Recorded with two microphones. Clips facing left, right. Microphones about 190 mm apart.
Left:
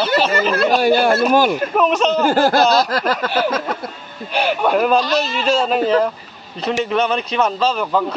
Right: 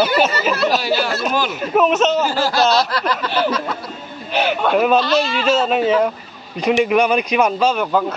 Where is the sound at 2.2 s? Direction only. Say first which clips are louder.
Left 3 dB; 55° left (ahead or behind).